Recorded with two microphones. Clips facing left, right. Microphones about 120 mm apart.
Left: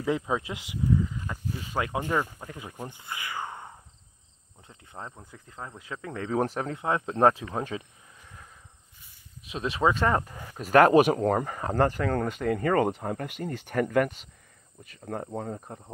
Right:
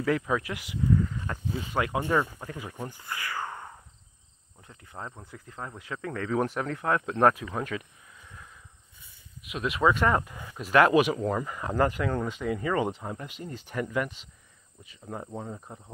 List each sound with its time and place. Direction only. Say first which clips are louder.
0.0 s speech: right 1 dB; 20° left (ahead or behind)
1.8 s speech: right 1 dB; 20° left (ahead or behind)
4.6 s cricket: right 1 dB; 25° left (ahead or behind)
5.2 s speech: right 2 dB; 20° left (ahead or behind)
6.7 s speech: right 1 dB; 25° left (ahead or behind); by 12.2 s 40° left (ahead or behind)
12.2 s speech: left 3 dB; 55° left (ahead or behind)